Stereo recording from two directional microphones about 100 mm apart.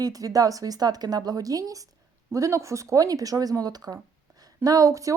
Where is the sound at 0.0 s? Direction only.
35° right (ahead or behind).